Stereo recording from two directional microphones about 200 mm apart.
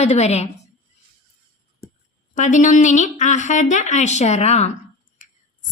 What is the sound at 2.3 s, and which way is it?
A woman's voice, 40° left (ahead or behind).